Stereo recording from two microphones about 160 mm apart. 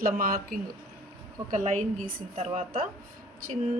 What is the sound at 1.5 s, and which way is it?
Speech, 55° right (ahead or behind).